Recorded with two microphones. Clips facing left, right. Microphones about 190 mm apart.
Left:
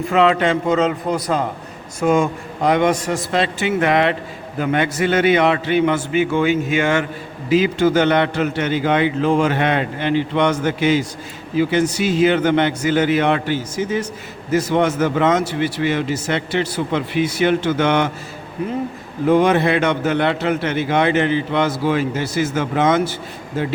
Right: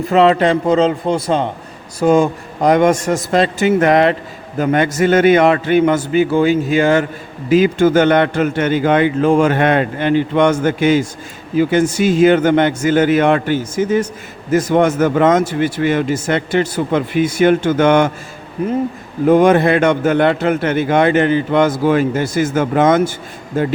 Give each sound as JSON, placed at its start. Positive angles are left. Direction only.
{"t": 0.1, "sound": "a man's voice", "side_deg": -35}
{"t": 7.5, "sound": "a man's voice", "side_deg": -50}
{"t": 19.3, "sound": "a man's voice", "side_deg": -50}